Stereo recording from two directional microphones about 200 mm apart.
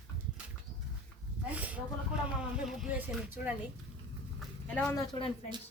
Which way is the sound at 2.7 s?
5° right (ahead or behind).